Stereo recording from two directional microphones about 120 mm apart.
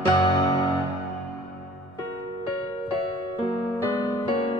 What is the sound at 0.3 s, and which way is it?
Music, 40° left (ahead or behind).